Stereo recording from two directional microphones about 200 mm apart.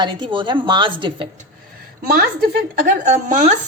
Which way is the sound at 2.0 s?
50° right (ahead or behind).